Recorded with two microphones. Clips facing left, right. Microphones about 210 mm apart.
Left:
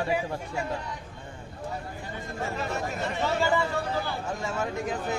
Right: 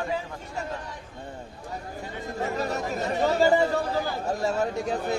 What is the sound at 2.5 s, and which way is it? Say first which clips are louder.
Speech: right 2 dB; 40° right (ahead or behind).